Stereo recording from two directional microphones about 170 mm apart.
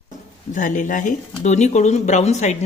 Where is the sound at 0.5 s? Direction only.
50° left (ahead or behind).